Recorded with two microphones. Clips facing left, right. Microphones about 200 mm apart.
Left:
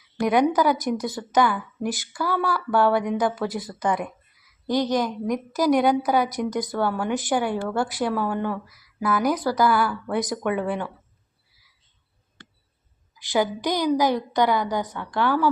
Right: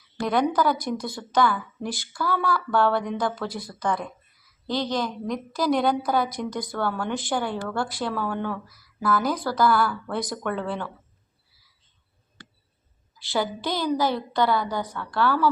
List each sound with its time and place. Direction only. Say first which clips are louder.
0.2 s a woman's voice: left 3 dB; 15° left (ahead or behind)
13.1 s a woman's voice: left 4 dB; 15° left (ahead or behind)